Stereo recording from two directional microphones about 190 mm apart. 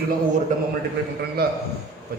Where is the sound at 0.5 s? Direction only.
40° right (ahead or behind).